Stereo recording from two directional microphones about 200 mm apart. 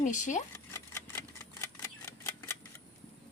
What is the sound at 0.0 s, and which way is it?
Speech, 40° left (ahead or behind).